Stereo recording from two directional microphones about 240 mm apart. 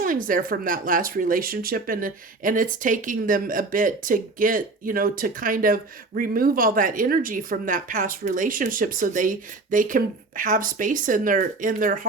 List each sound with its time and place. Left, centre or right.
0.0 s speech: right